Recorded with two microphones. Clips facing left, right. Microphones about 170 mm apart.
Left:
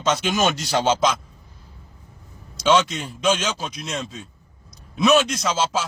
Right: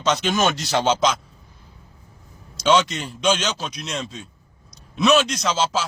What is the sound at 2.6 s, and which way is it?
A man's voice, centre (ahead or behind).